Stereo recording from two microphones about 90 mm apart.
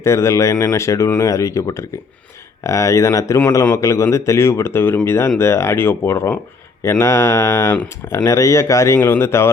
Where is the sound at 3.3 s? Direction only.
25° left (ahead or behind).